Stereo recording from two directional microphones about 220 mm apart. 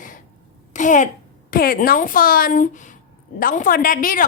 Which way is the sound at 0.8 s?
35° left (ahead or behind).